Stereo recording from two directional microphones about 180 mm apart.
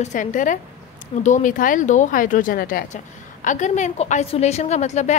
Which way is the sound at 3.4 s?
40° left (ahead or behind).